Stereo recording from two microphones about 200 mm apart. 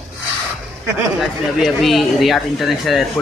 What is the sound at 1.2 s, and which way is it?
Speech, centre (ahead or behind).